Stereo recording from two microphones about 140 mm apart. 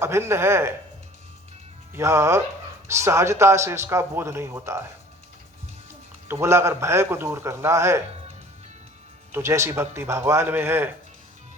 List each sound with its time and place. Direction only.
0.0 s a man's voice: 20° right (ahead or behind)
2.0 s speech: 20° right (ahead or behind)
6.2 s speech: 20° right (ahead or behind)
9.3 s a man's voice: 20° right (ahead or behind)